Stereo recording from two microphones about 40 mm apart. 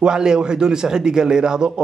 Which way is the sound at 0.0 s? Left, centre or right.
Centre.